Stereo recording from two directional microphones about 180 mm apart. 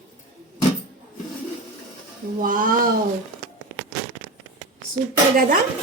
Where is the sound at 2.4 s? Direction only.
50° right (ahead or behind).